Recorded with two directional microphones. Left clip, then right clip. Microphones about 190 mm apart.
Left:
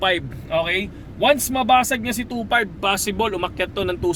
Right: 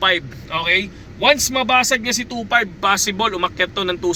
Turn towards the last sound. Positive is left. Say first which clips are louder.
# right 2 dB
turn(degrees=10)  # may be behind; listen again after turning